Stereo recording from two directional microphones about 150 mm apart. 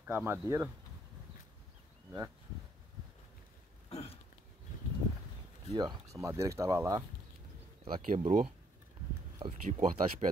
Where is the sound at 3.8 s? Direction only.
45° left (ahead or behind).